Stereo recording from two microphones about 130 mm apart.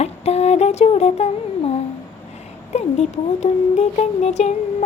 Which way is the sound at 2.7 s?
60° left (ahead or behind).